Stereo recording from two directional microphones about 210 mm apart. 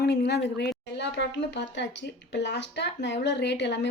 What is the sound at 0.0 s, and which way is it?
Speech, 50° left (ahead or behind).